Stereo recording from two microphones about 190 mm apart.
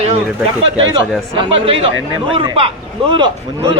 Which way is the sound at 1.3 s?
25° right (ahead or behind).